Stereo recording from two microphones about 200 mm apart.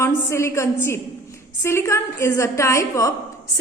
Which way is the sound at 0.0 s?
15° left (ahead or behind).